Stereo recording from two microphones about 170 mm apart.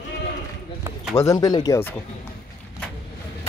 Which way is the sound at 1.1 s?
20° left (ahead or behind).